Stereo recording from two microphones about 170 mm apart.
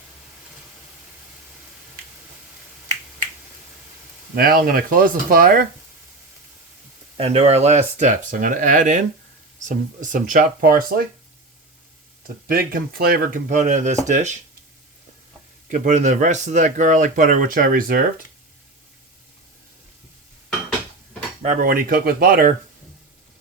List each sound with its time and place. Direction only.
4.4 s speech: 60° right (ahead or behind)
7.2 s speech: 35° right (ahead or behind); by 11.0 s 60° right (ahead or behind)
12.5 s speech: 60° right (ahead or behind)
13.6 s speech: 45° right (ahead or behind)
15.7 s speech: 45° right (ahead or behind)
21.4 s speech: 50° right (ahead or behind)